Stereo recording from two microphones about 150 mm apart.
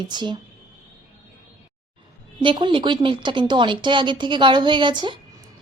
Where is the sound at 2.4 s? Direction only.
30° right (ahead or behind).